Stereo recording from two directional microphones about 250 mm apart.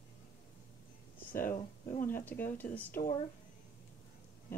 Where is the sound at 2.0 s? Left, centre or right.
Centre.